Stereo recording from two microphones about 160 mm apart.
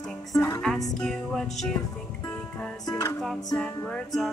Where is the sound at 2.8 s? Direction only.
25° left (ahead or behind).